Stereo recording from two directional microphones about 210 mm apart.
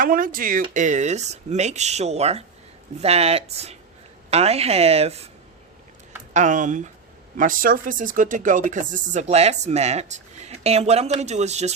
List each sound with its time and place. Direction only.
0.0 s a woman's voice: 40° right (ahead or behind)
6.3 s speech: 35° right (ahead or behind)